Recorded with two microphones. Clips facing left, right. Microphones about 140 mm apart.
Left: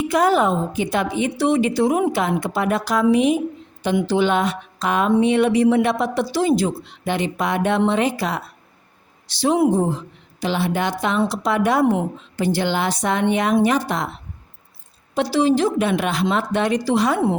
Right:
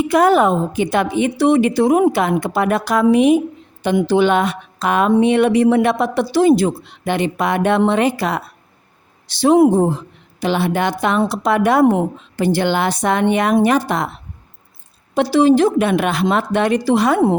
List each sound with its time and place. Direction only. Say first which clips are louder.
0.1 s speech: right 4 dB; 60° right (ahead or behind)
15.1 s speech: right 5 dB; 55° right (ahead or behind)